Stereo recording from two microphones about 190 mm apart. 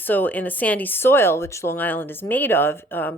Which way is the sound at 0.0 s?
10° left (ahead or behind).